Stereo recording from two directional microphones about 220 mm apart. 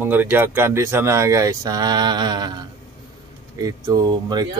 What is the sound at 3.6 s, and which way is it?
Speech, 15° right (ahead or behind).